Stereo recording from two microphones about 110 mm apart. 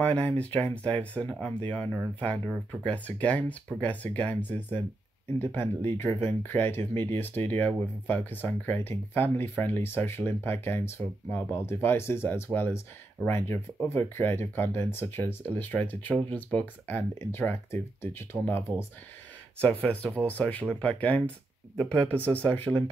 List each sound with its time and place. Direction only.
0.0 s speech: 15° left (ahead or behind)